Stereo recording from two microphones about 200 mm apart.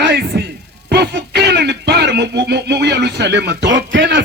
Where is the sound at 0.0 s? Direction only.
55° right (ahead or behind).